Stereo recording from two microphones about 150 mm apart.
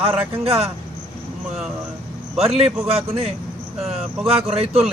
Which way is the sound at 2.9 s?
40° right (ahead or behind).